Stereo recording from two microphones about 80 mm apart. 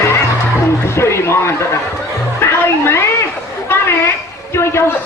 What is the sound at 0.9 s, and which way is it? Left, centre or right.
Speech, left.